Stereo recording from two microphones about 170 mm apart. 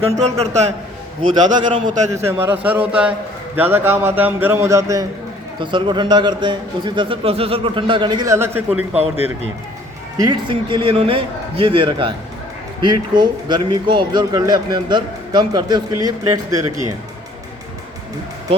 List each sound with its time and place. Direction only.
0.2 s a man's voice: 40° right (ahead or behind)
2.1 s a man's voice: 15° right (ahead or behind)
10.2 s a man's voice: 25° right (ahead or behind)